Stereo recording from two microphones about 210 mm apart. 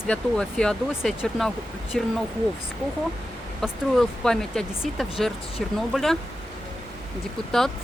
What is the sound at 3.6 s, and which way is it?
Speech, centre (ahead or behind).